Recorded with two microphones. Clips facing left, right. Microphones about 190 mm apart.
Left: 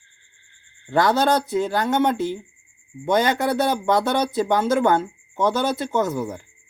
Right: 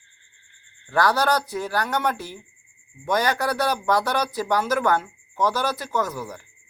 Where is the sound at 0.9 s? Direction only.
20° left (ahead or behind).